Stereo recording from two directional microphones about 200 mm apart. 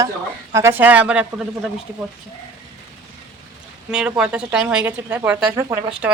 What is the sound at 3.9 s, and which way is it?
A woman's voice, 5° right (ahead or behind).